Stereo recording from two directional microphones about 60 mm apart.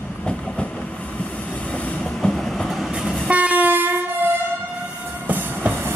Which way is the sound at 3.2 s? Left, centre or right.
Right.